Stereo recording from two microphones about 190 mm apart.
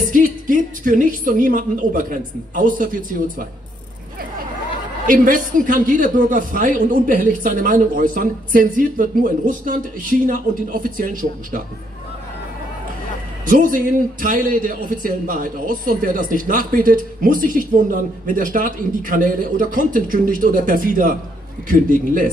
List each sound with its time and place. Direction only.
0.1 s a man's voice: 45° right (ahead or behind)
5.0 s a man's voice: 45° right (ahead or behind)
13.5 s a man's voice: 45° right (ahead or behind)